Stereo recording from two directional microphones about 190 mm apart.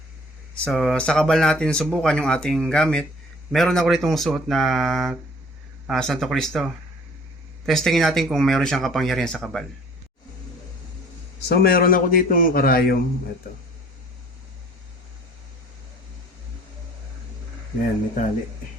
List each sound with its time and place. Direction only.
0.5 s speech: 5° left (ahead or behind)
11.4 s a man's voice: 55° left (ahead or behind)